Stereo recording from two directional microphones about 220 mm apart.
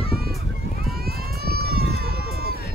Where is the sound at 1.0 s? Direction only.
45° right (ahead or behind).